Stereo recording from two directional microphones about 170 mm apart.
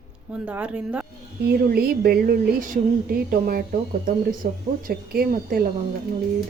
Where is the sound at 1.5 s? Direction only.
65° right (ahead or behind).